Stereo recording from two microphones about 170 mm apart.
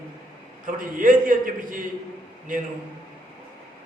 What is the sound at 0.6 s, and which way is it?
A man's voice, 50° right (ahead or behind).